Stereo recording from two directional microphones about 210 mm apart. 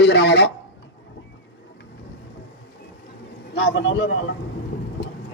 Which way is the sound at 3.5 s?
60° left (ahead or behind).